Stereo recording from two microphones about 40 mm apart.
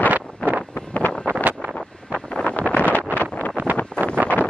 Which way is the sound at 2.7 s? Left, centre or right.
Left.